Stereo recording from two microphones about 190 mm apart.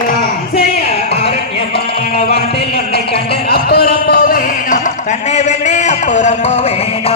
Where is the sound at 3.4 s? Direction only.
55° left (ahead or behind).